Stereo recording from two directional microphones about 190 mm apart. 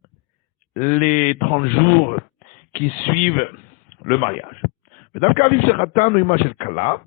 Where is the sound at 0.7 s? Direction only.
40° left (ahead or behind).